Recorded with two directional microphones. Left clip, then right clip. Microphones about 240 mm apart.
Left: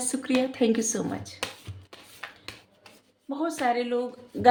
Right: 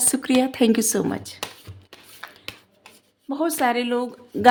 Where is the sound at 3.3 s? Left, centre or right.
Right.